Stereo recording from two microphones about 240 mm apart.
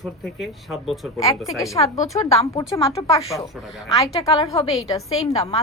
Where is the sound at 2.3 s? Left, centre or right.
Left.